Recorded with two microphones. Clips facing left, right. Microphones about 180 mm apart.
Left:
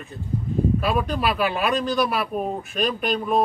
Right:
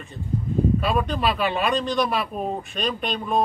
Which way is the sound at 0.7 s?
Centre (ahead or behind).